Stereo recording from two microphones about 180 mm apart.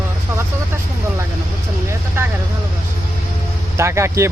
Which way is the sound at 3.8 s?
15° right (ahead or behind).